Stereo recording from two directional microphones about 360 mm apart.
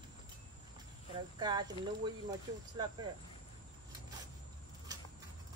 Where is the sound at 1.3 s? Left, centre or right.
Centre.